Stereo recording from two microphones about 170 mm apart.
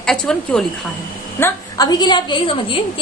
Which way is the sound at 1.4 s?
20° left (ahead or behind).